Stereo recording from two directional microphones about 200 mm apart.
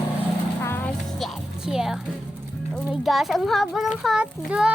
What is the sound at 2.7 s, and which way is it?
A child's voice, centre (ahead or behind).